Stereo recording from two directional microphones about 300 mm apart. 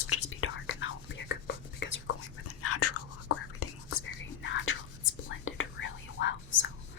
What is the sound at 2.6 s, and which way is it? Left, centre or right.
Whispering, left.